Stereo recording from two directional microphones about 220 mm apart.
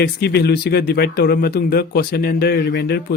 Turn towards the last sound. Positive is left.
turn(degrees=50)  # may be behind; listen again after turning